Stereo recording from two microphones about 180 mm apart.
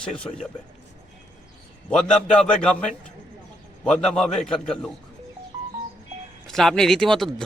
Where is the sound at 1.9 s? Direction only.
5° left (ahead or behind).